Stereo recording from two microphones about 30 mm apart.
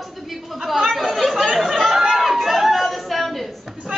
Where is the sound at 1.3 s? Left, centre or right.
Centre.